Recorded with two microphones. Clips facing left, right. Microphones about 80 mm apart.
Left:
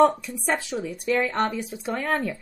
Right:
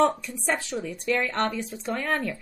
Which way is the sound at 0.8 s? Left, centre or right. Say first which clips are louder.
Left 3 dB; centre.